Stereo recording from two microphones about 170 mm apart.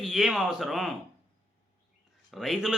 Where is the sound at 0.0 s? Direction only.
Centre (ahead or behind).